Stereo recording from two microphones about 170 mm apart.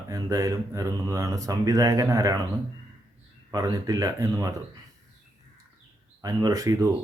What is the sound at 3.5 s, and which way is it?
Speech, 20° right (ahead or behind).